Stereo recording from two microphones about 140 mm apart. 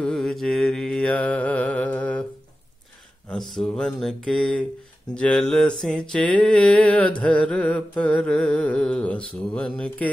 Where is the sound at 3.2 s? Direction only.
Centre (ahead or behind).